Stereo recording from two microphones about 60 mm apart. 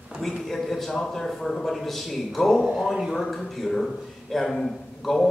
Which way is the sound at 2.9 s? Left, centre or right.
Centre.